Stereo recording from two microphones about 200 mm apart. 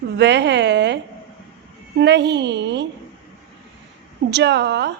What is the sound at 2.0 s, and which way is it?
Speech, 60° right (ahead or behind).